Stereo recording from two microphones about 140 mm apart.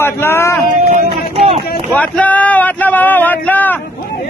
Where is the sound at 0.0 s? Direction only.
20° left (ahead or behind).